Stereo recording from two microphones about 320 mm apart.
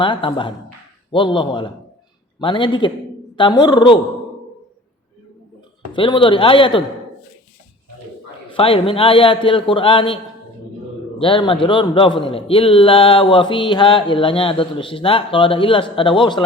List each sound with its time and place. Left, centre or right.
0.0 s a man's voice: centre
5.9 s a man's voice: centre
8.4 s a man's voice: centre
11.2 s a man's voice: centre